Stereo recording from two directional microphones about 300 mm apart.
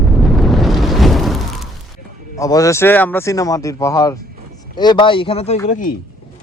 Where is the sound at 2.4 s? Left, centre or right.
Centre.